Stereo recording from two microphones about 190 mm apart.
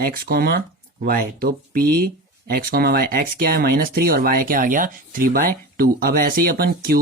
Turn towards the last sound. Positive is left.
turn(degrees=-55)  # may be behind; listen again after turning